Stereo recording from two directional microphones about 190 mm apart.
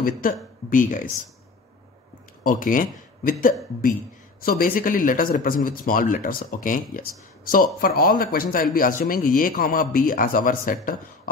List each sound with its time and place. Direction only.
0.2 s speech: 45° left (ahead or behind)
2.4 s a man's voice: 45° left (ahead or behind)